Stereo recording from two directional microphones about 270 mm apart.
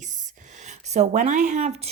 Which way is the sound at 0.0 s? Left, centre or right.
Right.